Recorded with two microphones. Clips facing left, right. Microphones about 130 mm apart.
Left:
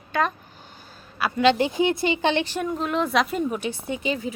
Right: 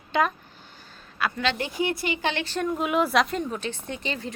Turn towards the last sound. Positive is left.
turn(degrees=5)  # may be behind; listen again after turning